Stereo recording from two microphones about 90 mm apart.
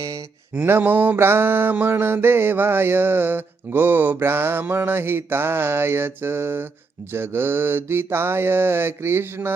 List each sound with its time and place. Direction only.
0.5 s mantra: 20° right (ahead or behind)